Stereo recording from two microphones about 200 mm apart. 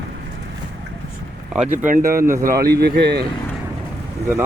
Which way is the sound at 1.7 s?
40° right (ahead or behind).